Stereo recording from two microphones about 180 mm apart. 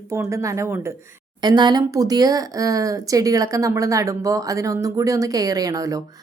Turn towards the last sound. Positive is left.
turn(degrees=-20)  # may be behind; listen again after turning